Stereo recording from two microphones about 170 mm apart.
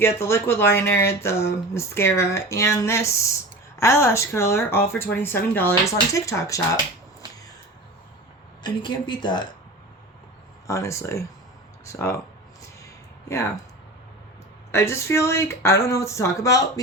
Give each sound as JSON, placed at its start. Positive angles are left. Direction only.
{"t": 0.0, "sound": "speech", "side_deg": 15}
{"t": 8.6, "sound": "speech", "side_deg": 25}
{"t": 10.7, "sound": "speech", "side_deg": 15}
{"t": 12.8, "sound": "a sound", "side_deg": 15}
{"t": 14.7, "sound": "speech", "side_deg": 15}